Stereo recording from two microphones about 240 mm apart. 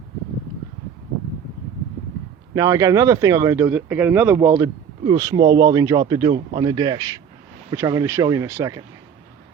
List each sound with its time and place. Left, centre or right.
2.6 s speech: centre